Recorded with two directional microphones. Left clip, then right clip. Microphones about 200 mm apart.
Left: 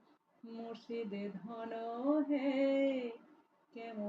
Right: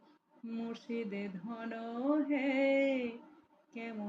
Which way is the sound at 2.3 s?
20° right (ahead or behind).